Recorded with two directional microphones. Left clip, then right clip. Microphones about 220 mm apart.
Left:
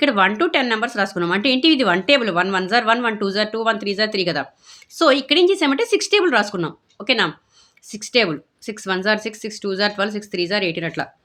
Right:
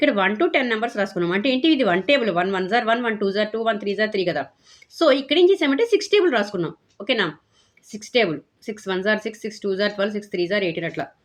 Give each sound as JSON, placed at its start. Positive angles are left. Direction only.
{"t": 0.0, "sound": "speech", "side_deg": 20}